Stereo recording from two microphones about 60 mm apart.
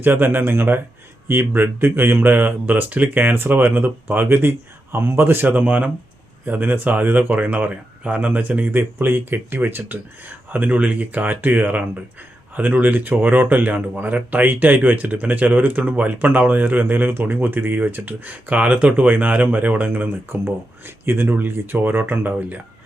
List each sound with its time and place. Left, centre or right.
0.0 s speech: right
20.3 s speech: right